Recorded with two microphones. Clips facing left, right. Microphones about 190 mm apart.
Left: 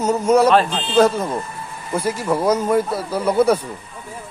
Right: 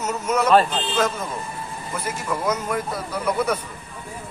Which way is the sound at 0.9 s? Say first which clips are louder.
Left 10 dB; 35° left (ahead or behind).